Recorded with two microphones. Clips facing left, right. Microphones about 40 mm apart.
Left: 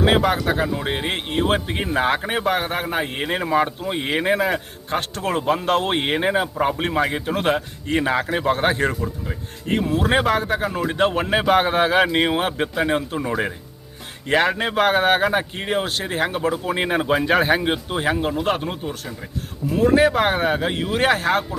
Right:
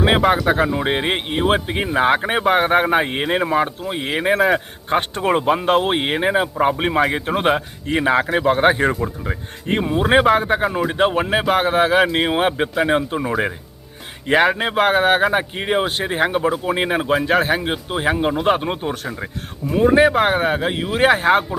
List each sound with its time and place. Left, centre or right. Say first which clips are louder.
0.0 s speech: right 3 dB; centre
3.2 s speech: right 2 dB; centre
3.8 s speech: even; centre
4.9 s speech: right 5 dB; right; by 9.0 s centre
9.2 s speech: right 4 dB; right
9.9 s speech: right 5 dB; centre
12.3 s speech: right 3 dB; centre
18.5 s speech: right 6 dB; right
19.8 s speech: right 2 dB; centre